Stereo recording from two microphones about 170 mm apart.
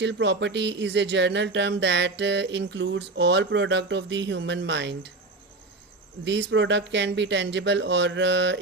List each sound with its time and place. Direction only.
0.0 s speech: 90° right
6.2 s speech: 90° right